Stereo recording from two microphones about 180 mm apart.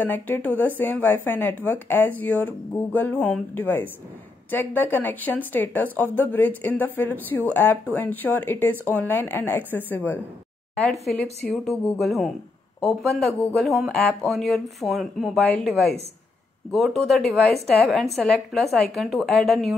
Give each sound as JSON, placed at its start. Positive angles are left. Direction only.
{"t": 0.0, "sound": "speech", "side_deg": 10}